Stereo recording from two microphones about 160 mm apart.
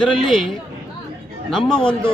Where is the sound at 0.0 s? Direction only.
Centre (ahead or behind).